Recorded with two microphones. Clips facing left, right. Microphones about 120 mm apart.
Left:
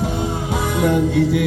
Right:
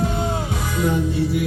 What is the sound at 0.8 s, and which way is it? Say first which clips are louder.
Music: left 4 dB; 75° left (ahead or behind).